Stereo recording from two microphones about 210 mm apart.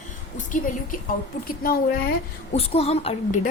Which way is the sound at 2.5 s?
30° left (ahead or behind).